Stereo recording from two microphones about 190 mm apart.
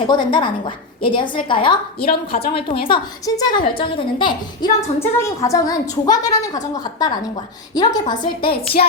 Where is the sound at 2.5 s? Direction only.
25° left (ahead or behind).